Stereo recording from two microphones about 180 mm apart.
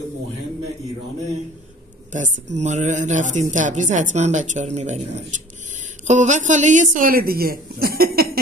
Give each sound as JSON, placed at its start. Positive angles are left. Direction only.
{"t": 2.1, "sound": "a woman's voice", "side_deg": -45}